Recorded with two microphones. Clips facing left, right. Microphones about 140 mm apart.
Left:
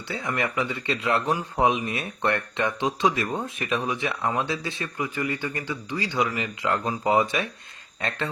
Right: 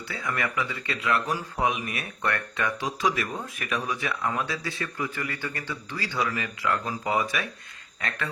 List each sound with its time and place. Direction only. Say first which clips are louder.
0.1 s speech: left 3 dB; 25° left (ahead or behind)